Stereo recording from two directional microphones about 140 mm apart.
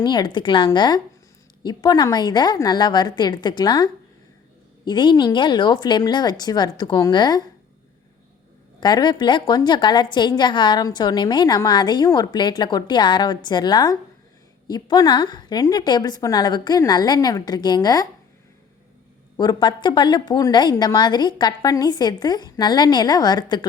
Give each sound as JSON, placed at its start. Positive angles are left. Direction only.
{"t": 0.0, "sound": "a woman's voice", "side_deg": 30}
{"t": 4.9, "sound": "a woman's voice", "side_deg": 30}
{"t": 8.8, "sound": "a woman's voice", "side_deg": 30}
{"t": 19.4, "sound": "a woman's voice", "side_deg": 30}